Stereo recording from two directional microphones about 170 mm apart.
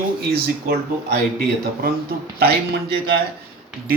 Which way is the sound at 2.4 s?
70° right (ahead or behind).